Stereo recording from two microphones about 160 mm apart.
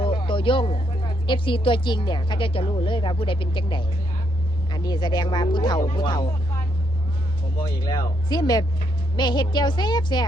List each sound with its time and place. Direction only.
0.0 s a woman's voice: 30° left (ahead or behind)
7.6 s a woman's voice: 30° left (ahead or behind)